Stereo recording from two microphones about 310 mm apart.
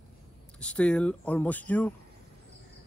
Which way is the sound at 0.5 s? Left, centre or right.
Centre.